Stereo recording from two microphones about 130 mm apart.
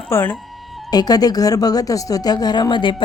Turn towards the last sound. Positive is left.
turn(degrees=40)  # may be behind; listen again after turning